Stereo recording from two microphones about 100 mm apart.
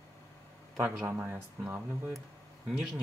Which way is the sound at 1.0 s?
20° right (ahead or behind).